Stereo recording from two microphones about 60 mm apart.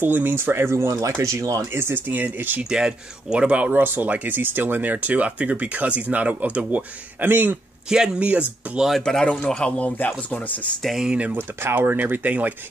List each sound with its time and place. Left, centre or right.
0.0 s speech: right
1.7 s speech: right
2.7 s speech: centre
3.8 s speech: right
7.2 s speech: right
7.9 s speech: centre
8.2 s speech: right
9.0 s speech: centre
9.7 s speech: left
10.8 s speech: centre
11.1 s speech: right
11.3 s speech: right